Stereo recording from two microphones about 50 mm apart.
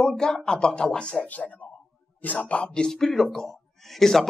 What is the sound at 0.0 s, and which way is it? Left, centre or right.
Speech, centre.